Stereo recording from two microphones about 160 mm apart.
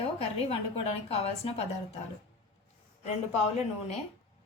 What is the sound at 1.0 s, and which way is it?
Speech, 40° left (ahead or behind).